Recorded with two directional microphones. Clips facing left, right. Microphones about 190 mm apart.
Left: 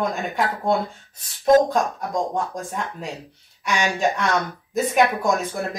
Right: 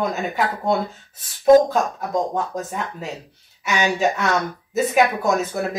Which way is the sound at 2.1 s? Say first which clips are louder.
Right 2 dB; 5° right (ahead or behind).